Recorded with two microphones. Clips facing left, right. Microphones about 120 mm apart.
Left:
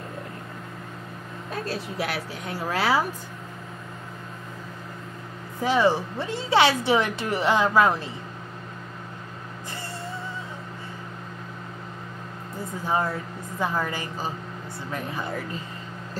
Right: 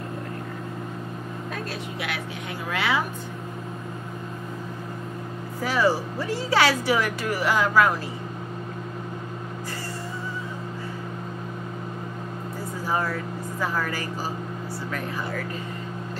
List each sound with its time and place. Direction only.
1.5 s a woman's voice: 35° left (ahead or behind)
5.6 s speech: 20° left (ahead or behind)
12.8 s a woman's voice: 25° left (ahead or behind)